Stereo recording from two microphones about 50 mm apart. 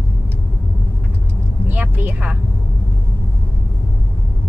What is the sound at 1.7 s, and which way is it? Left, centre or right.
Vehicle, right.